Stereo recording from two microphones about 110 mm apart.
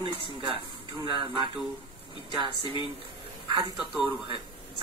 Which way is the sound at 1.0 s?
45° right (ahead or behind).